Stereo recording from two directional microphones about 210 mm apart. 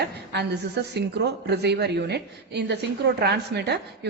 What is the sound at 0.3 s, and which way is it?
A woman's voice, 50° right (ahead or behind).